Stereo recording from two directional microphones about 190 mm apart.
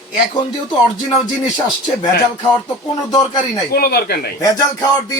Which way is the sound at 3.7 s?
55° left (ahead or behind).